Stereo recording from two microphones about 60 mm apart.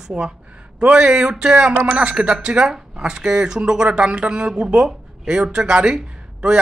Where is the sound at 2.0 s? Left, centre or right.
Centre.